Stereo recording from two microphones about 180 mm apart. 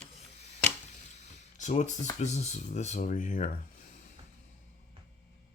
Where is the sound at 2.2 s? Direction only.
40° left (ahead or behind).